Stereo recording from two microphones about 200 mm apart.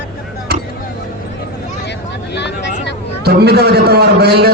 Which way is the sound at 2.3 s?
60° left (ahead or behind).